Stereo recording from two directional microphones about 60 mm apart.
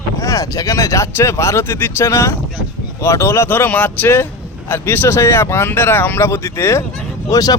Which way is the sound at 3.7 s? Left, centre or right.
Left.